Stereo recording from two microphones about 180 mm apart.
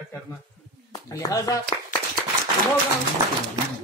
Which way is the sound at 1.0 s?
20° left (ahead or behind).